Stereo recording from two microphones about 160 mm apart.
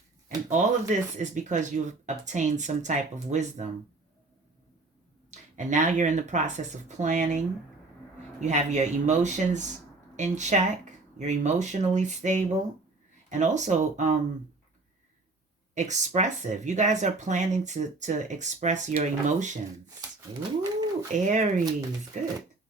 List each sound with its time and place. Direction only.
0.3 s speech: 50° right (ahead or behind)
5.3 s speech: 50° right (ahead or behind)
15.7 s speech: 50° right (ahead or behind)
21.1 s speech: 50° right (ahead or behind)
21.6 s speech: 25° right (ahead or behind)
22.1 s speech: 55° right (ahead or behind)